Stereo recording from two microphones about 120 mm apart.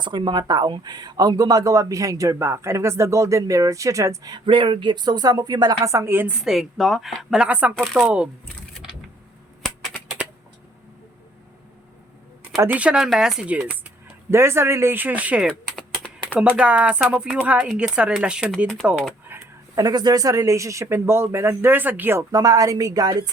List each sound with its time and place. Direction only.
0.0 s speech: 40° right (ahead or behind)
4.4 s speech: 45° right (ahead or behind); by 8.3 s 10° right (ahead or behind)
9.6 s typewriter: 5° left (ahead or behind)
12.6 s speech: 10° right (ahead or behind)
14.3 s speech: 20° right (ahead or behind)
15.4 s typing: 10° left (ahead or behind)
16.4 s speech: 10° right (ahead or behind)
19.3 s speech: 30° right (ahead or behind)
22.3 s speech: 30° right (ahead or behind)